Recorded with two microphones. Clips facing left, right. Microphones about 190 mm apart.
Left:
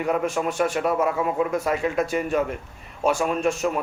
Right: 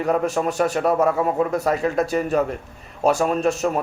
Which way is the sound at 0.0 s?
35° right (ahead or behind).